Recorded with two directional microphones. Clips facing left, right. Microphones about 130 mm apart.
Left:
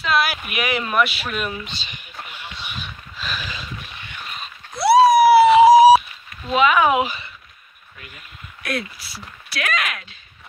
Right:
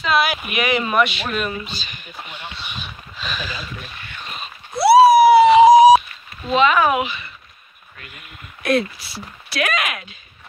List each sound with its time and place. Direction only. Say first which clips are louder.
0.0 s a sound: right 2 dB; centre (ahead or behind)
0.5 s speech: right 3 dB; 5° left (ahead or behind)
1.7 s speech: right 2 dB; 25° left (ahead or behind)
2.3 s a sound: right 1 dB; 10° left (ahead or behind)
4.7 s a sound: right 3 dB; 5° right (ahead or behind)
6.5 s speech: right 1 dB; 10° left (ahead or behind)
7.0 s speech: left 2 dB; 30° left (ahead or behind)
8.6 s speech: right 8 dB; 25° right (ahead or behind)
9.7 s speech: right 2 dB; 15° right (ahead or behind)